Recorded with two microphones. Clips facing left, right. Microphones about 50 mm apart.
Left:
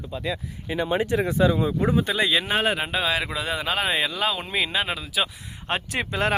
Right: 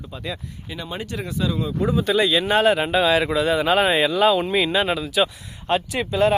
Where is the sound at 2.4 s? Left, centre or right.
Centre.